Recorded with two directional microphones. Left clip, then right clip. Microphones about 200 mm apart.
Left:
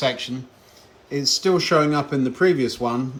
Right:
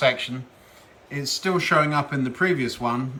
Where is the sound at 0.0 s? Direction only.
10° left (ahead or behind).